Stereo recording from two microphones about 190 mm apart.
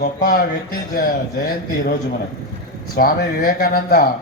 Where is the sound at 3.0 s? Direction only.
50° left (ahead or behind).